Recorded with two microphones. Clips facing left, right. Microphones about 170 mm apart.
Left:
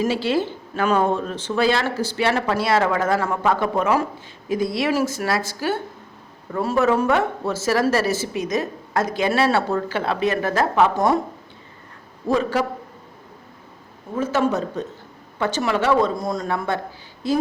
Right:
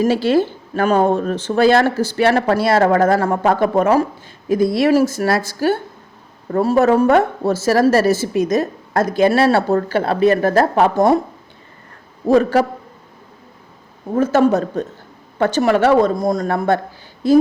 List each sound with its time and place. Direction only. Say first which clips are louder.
0.0 s speech: right 6 dB; 45° right (ahead or behind)
12.3 s speech: right 7 dB; 45° right (ahead or behind)
14.2 s speech: right 7 dB; 45° right (ahead or behind)